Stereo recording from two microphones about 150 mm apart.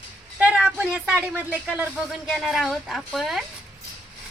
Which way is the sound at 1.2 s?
10° right (ahead or behind).